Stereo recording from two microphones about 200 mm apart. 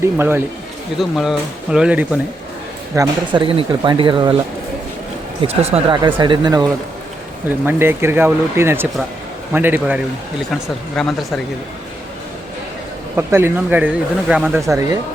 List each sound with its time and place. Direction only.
0.0 s speech: 10° right (ahead or behind)
2.9 s speech: 20° right (ahead or behind)
5.5 s speech: 30° right (ahead or behind)
7.6 s speech: 10° right (ahead or behind)
13.1 s speech: 10° right (ahead or behind)
14.7 s speech: 15° right (ahead or behind)